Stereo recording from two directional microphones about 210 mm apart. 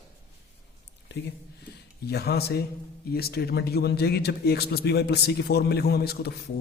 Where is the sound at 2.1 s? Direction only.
50° left (ahead or behind).